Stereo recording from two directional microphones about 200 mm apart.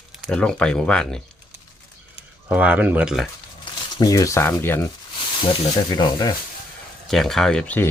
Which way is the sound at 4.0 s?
15° left (ahead or behind).